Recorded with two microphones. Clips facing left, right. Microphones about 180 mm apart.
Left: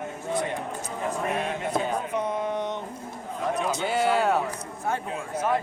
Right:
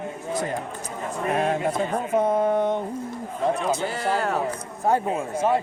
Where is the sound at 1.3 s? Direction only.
40° right (ahead or behind).